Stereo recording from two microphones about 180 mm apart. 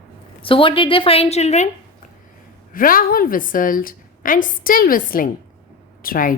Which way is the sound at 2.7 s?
50° left (ahead or behind).